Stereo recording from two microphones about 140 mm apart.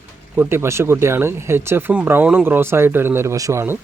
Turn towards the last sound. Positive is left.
turn(degrees=-20)  # may be behind; listen again after turning